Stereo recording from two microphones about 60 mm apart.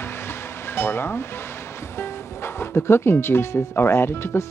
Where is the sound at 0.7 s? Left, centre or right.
Left.